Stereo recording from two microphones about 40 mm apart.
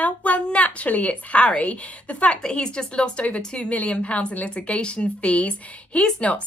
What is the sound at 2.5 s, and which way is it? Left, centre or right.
A woman's voice, left.